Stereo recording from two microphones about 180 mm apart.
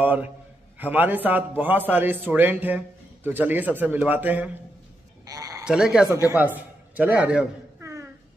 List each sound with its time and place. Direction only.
0.0 s a man's voice: 10° right (ahead or behind)
5.2 s sheep: 20° right (ahead or behind)
5.6 s a man's voice: 5° right (ahead or behind)